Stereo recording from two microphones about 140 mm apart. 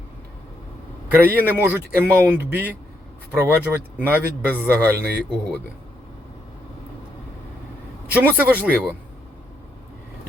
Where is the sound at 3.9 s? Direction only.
15° right (ahead or behind).